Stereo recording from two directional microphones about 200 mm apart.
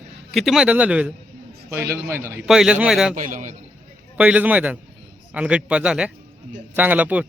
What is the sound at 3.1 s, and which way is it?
Speech, 40° right (ahead or behind).